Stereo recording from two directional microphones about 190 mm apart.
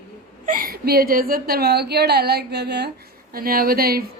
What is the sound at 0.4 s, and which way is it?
A woman's voice, 45° right (ahead or behind).